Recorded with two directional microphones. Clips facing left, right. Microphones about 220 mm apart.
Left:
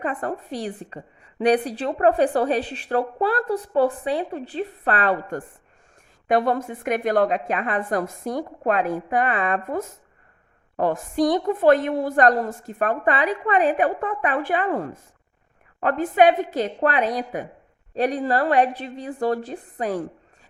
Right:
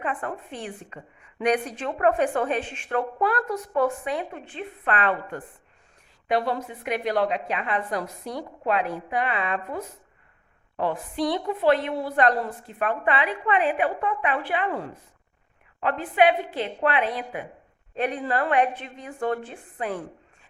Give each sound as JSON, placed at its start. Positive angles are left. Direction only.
{"t": 0.0, "sound": "a woman's voice", "side_deg": 40}